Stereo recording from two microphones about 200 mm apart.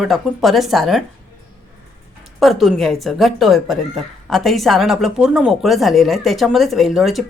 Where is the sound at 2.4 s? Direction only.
Centre (ahead or behind).